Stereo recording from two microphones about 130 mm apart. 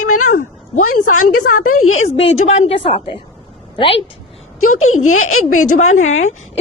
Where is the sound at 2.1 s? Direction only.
55° left (ahead or behind).